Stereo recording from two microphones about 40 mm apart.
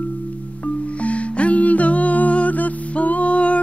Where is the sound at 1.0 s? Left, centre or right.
Left.